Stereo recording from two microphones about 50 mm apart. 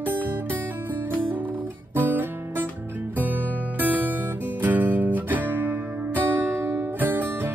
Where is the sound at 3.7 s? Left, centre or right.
Right.